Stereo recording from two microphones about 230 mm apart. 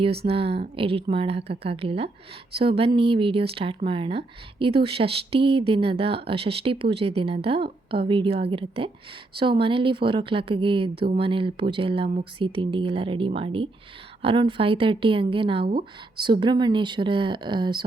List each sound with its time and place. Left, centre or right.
0.3 s speech: right